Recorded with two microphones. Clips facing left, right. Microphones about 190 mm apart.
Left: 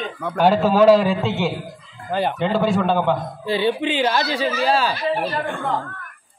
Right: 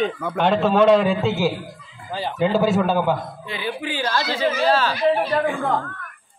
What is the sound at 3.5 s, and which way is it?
Speech, 30° left (ahead or behind).